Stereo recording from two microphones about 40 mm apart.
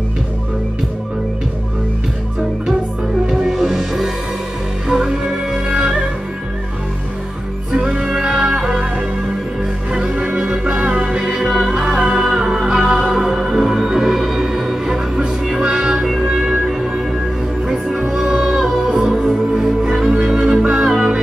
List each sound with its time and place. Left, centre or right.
3.3 s music: centre
7.7 s music: centre
9.9 s organ: centre
10.6 s music: right; by 18.9 s centre
18.9 s music: centre